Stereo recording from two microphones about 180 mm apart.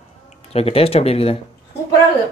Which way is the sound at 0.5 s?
35° left (ahead or behind).